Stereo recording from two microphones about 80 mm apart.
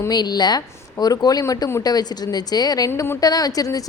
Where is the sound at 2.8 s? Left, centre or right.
Left.